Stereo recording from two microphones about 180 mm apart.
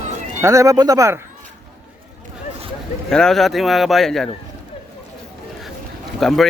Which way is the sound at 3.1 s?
5° left (ahead or behind).